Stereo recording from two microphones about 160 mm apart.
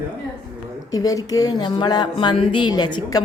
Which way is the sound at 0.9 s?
20° left (ahead or behind).